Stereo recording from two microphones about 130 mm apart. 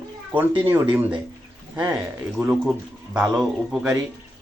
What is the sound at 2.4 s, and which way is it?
Speech, 10° right (ahead or behind).